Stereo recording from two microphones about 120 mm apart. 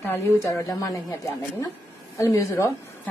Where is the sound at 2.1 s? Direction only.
25° left (ahead or behind).